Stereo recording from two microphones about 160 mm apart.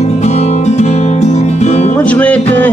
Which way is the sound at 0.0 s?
45° left (ahead or behind).